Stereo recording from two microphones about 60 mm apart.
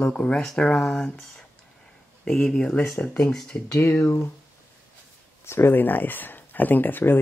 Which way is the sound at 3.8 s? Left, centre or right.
Left.